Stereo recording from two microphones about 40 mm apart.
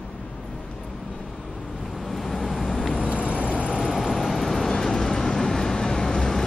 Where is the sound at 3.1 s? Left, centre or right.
Right.